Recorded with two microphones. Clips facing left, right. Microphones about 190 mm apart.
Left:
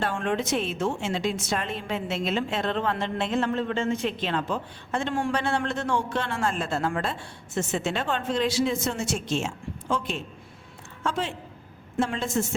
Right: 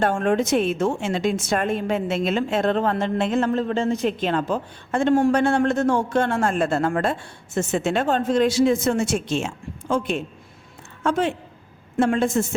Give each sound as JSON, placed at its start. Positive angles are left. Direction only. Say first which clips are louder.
{"t": 0.0, "sound": "a woman's voice", "louder": "right 7 dB", "side_deg": -45}